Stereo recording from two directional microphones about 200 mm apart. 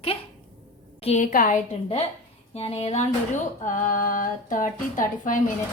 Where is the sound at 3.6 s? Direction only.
40° left (ahead or behind).